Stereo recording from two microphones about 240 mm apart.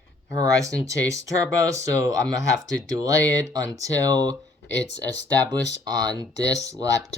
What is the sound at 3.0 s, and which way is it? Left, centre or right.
Speech, centre.